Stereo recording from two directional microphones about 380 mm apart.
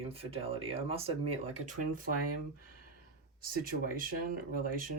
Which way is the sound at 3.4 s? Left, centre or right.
Right.